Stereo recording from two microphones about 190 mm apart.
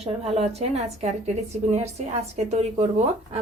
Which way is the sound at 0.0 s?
30° right (ahead or behind).